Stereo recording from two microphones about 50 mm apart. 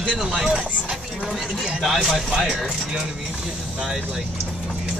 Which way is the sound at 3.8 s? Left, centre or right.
Centre.